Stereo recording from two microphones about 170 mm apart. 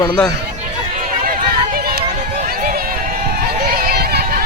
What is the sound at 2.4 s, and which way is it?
Run, 60° right (ahead or behind).